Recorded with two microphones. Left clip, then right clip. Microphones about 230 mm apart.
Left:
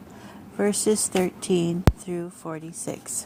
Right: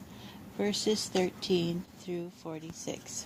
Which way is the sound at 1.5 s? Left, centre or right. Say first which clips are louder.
Left 8 dB; left.